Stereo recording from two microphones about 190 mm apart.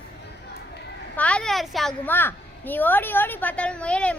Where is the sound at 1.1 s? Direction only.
5° left (ahead or behind).